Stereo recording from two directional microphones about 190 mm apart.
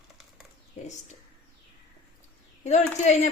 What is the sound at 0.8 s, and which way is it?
Speech, 40° left (ahead or behind).